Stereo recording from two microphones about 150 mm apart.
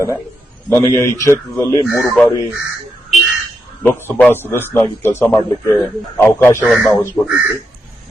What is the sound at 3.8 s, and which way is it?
A man's voice, 10° left (ahead or behind).